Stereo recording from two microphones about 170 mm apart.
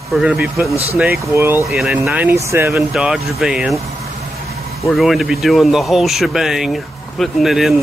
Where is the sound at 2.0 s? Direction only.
15° right (ahead or behind).